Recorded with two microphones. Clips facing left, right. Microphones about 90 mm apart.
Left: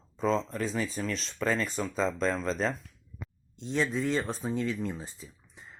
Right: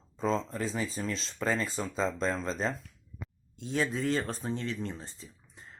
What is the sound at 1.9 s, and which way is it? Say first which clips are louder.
Speech: left 1 dB; centre (ahead or behind).